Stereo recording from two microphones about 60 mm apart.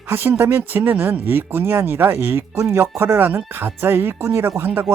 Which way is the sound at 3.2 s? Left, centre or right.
Right.